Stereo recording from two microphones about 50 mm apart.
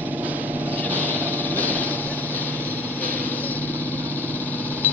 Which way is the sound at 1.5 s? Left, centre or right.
Left.